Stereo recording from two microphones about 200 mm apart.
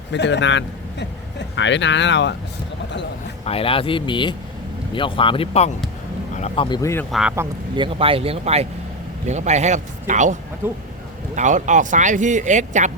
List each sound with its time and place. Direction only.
0.1 s a man's voice: 60° left (ahead or behind)
3.4 s speech: 30° left (ahead or behind)
6.7 s speech: 15° left (ahead or behind)
7.1 s speech: 5° right (ahead or behind)
7.8 s speech: 25° right (ahead or behind)
10.6 s speech: 10° right (ahead or behind)
11.3 s speech: 40° right (ahead or behind)